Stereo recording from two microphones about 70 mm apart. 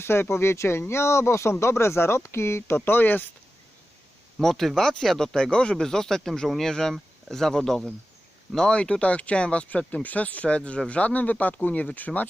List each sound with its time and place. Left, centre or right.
0.0 s speech: left
4.4 s speech: centre; by 12.3 s left